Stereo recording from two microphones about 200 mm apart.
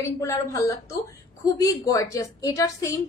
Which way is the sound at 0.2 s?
15° left (ahead or behind).